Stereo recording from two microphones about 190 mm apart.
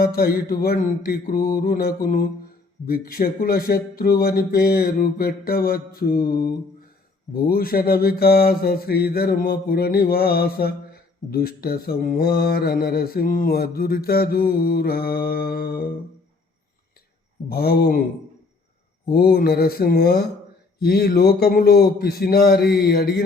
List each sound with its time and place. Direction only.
0.0 s mantra: 55° left (ahead or behind)
17.5 s mantra: 55° left (ahead or behind)
19.1 s mantra: 55° left (ahead or behind)
20.8 s speech: 55° left (ahead or behind)